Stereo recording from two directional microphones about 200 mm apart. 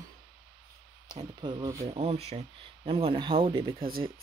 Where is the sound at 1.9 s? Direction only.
30° right (ahead or behind).